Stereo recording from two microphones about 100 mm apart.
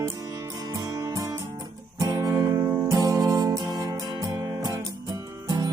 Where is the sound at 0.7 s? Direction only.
40° right (ahead or behind).